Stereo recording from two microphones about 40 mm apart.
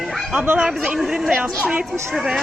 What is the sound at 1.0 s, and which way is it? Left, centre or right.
Speech, centre.